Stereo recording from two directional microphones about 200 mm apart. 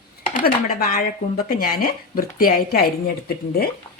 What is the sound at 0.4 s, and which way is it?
A woman's voice, 45° left (ahead or behind).